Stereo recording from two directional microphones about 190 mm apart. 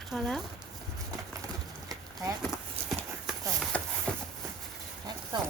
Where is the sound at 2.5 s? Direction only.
Centre (ahead or behind).